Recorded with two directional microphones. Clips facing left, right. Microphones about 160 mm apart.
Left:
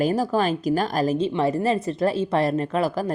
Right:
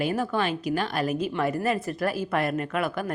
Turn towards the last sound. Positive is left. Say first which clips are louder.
# left 5 dB
turn(degrees=35)  # may be behind; listen again after turning